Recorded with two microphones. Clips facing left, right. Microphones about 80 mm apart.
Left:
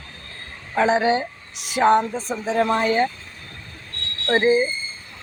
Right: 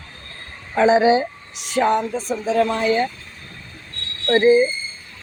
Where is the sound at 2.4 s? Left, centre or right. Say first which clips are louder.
Right 1 dB; left.